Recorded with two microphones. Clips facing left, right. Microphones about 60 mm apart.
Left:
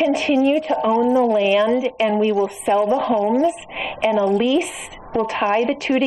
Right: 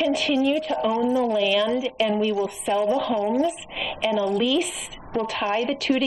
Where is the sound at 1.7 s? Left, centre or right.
Left.